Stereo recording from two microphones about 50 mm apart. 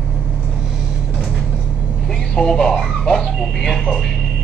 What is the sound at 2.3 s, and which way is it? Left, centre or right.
Music, centre.